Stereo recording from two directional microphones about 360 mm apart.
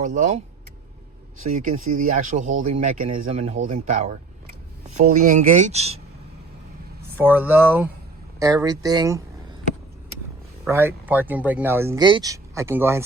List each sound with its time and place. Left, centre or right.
0.0 s speech: right
1.5 s speech: right
2.0 s speech: right
7.2 s speech: centre
10.7 s speech: centre